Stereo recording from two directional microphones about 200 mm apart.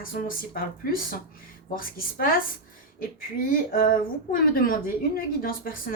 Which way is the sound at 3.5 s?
45° left (ahead or behind).